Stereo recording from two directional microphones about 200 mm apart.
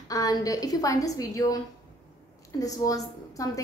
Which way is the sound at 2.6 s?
15° left (ahead or behind).